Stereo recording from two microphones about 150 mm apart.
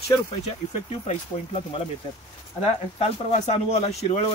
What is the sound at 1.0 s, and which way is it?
Speech, 45° left (ahead or behind).